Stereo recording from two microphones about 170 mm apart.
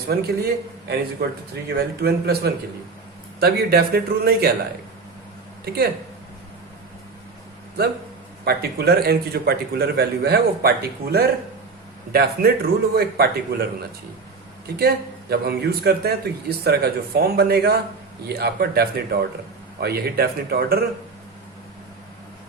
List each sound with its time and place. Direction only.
0.1 s a man's voice: 70° right (ahead or behind)
2.0 s a man's voice: 70° right (ahead or behind)
5.6 s a man's voice: 70° right (ahead or behind)
7.8 s a man's voice: 65° right (ahead or behind)
14.8 s a man's voice: 70° right (ahead or behind)